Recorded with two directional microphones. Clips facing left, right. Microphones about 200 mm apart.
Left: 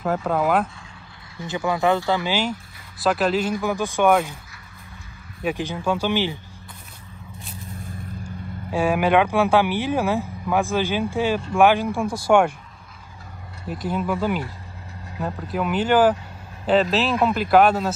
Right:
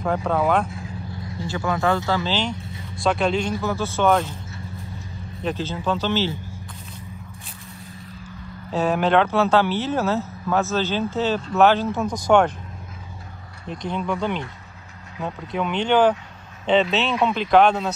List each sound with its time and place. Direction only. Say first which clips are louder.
0.0 s speech: even; 5° left (ahead or behind)
1.4 s speech: left 1 dB; 20° left (ahead or behind)
3.0 s speech: left 1 dB; 5° left (ahead or behind)
3.5 s speech: left 1 dB; 15° left (ahead or behind)
5.4 s speech: left 1 dB; 10° left (ahead or behind)
8.2 s speech: left 4 dB; 10° left (ahead or behind)
13.7 s speech: left 1 dB; 5° left (ahead or behind)